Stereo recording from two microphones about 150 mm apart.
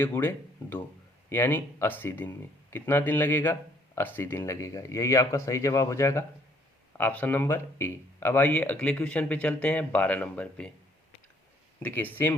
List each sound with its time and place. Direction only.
0.0 s speech: 15° left (ahead or behind)
11.8 s speech: 10° left (ahead or behind)